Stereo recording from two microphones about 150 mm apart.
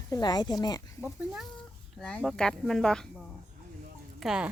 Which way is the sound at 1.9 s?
5° left (ahead or behind).